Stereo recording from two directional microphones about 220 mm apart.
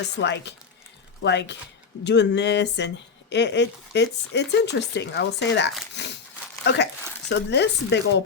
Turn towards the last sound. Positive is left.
turn(degrees=50)  # may be behind; listen again after turning